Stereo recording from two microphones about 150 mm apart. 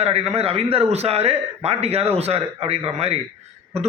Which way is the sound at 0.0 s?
45° right (ahead or behind).